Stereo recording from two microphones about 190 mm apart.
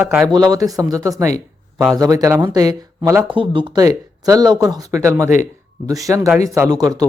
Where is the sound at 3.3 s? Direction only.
25° right (ahead or behind).